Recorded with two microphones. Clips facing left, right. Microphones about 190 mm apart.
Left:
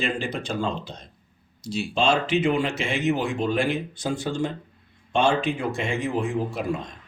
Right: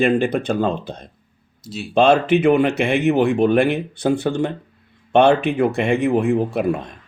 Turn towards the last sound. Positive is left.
turn(degrees=-60)  # may be behind; listen again after turning